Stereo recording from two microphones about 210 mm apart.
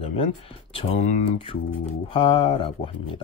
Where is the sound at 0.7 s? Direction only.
25° left (ahead or behind).